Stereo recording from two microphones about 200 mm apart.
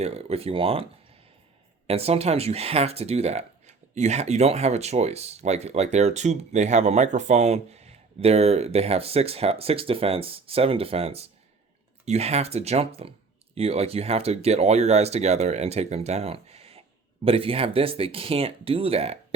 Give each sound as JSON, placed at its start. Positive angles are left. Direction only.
{"t": 0.0, "sound": "speech", "side_deg": -30}
{"t": 1.9, "sound": "speech", "side_deg": -30}